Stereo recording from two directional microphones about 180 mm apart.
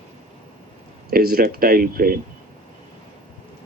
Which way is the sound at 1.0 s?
55° right (ahead or behind).